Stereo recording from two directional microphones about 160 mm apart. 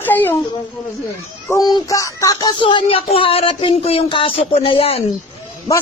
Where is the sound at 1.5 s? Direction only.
25° left (ahead or behind).